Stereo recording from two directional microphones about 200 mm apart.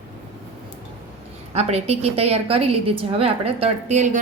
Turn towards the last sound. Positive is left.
turn(degrees=-35)  # may be behind; listen again after turning